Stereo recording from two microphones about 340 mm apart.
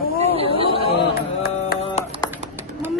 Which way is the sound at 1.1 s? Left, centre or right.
Left.